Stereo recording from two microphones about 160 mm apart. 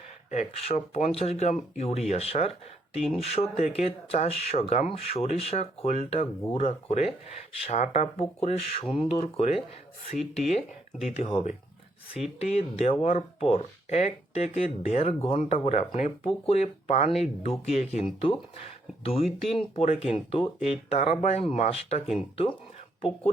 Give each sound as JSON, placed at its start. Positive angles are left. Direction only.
{"t": 0.3, "sound": "speech", "side_deg": 45}